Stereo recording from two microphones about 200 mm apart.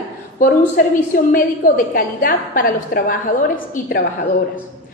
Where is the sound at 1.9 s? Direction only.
45° left (ahead or behind).